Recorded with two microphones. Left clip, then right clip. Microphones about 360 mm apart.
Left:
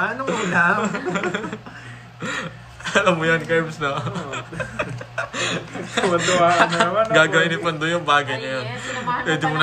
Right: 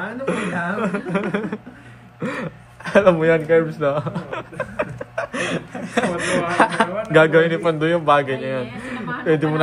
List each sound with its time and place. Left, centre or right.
0.2 s a man's voice: centre